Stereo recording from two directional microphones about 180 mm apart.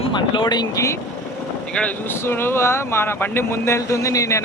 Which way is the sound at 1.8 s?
10° left (ahead or behind).